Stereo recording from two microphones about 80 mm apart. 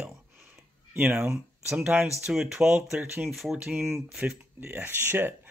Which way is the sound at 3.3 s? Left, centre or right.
Centre.